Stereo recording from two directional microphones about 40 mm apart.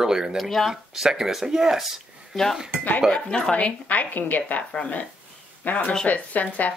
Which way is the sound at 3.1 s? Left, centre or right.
Centre.